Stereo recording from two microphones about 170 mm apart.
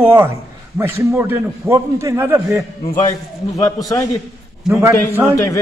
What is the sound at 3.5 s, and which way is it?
Speech, 20° left (ahead or behind).